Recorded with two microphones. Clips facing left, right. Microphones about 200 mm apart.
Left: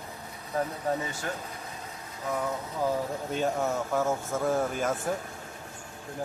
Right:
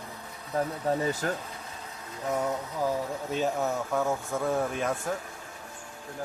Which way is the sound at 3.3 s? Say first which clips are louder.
Even; centre (ahead or behind).